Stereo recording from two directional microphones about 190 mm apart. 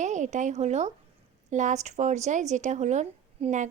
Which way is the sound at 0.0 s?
40° right (ahead or behind).